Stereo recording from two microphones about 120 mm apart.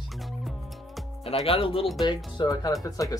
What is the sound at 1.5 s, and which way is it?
Speech, 50° left (ahead or behind).